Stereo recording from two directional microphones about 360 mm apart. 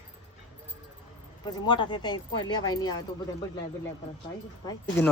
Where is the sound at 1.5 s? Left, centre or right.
Centre.